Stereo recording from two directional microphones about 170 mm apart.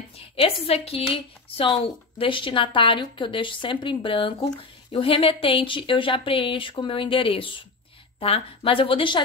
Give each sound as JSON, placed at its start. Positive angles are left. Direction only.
{"t": 0.4, "sound": "speech", "side_deg": 35}